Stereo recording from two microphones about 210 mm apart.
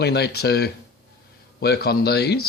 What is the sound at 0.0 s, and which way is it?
Speech, 50° left (ahead or behind).